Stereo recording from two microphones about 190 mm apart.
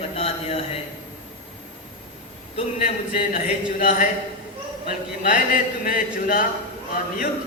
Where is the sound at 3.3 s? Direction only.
40° left (ahead or behind).